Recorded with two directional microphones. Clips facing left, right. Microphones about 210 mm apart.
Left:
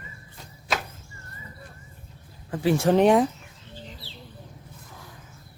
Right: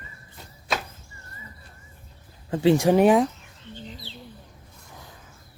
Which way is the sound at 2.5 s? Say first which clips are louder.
Right 3 dB; 25° right (ahead or behind).